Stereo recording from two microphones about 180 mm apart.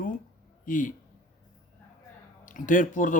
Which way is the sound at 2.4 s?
45° left (ahead or behind).